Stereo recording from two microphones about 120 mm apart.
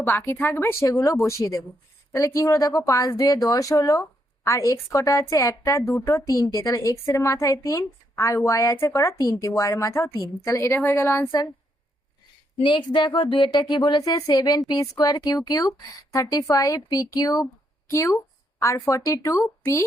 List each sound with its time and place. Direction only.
0.0 s a woman's voice: 20° left (ahead or behind)
12.5 s a woman's voice: 40° left (ahead or behind); by 19.8 s 25° left (ahead or behind)